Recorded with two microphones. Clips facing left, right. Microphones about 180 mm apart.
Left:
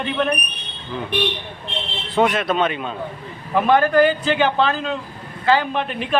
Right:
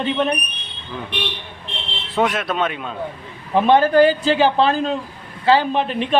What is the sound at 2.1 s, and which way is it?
Speech, centre (ahead or behind).